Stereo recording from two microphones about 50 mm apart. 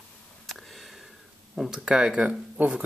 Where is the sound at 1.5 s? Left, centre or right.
Centre.